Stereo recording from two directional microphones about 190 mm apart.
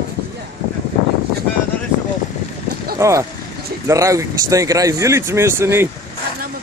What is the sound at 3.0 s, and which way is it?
Speech, 15° right (ahead or behind).